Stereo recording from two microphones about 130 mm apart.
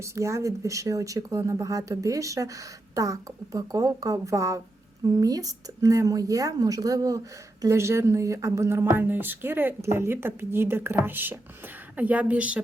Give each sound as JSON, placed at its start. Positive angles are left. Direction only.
{"t": 0.0, "sound": "speech", "side_deg": -20}